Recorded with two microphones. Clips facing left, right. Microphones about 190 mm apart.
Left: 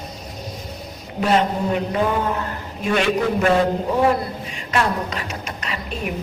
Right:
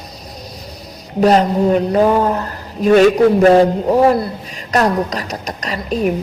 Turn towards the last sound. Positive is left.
turn(degrees=-40)  # may be behind; listen again after turning